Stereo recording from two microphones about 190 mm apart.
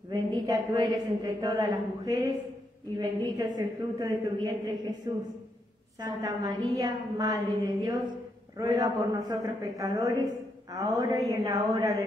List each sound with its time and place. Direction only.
0.1 s a woman's voice: 20° right (ahead or behind)